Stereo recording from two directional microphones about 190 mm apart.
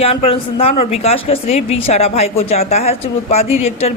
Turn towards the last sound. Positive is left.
turn(degrees=35)  # may be behind; listen again after turning